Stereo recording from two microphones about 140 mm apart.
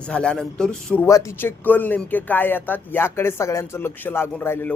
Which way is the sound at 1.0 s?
20° left (ahead or behind).